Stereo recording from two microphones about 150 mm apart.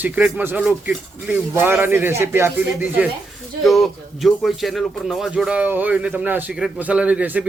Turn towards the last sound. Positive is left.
turn(degrees=-10)  # may be behind; listen again after turning